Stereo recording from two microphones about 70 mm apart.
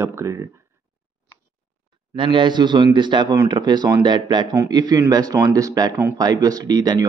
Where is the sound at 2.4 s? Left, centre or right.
Right.